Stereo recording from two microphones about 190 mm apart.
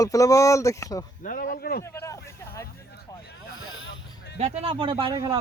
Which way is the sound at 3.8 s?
70° left (ahead or behind).